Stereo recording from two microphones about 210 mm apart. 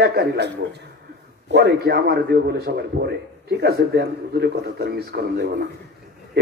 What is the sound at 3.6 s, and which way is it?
A man's voice, 50° right (ahead or behind).